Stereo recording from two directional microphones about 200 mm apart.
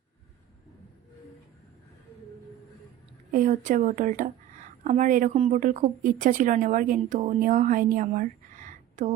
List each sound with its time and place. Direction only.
3.3 s a woman's voice: 40° right (ahead or behind)